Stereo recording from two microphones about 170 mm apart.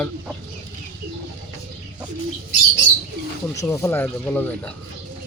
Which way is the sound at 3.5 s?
20° left (ahead or behind).